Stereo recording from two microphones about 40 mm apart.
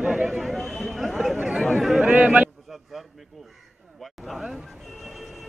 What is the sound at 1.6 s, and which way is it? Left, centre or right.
Speech, centre.